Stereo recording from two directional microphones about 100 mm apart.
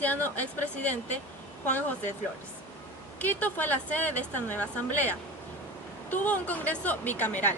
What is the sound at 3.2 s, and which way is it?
Speech, 15° left (ahead or behind).